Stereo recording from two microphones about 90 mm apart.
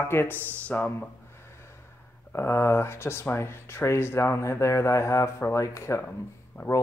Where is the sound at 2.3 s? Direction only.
30° left (ahead or behind).